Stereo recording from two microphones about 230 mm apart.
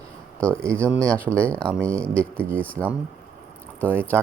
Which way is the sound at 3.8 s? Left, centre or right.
Centre.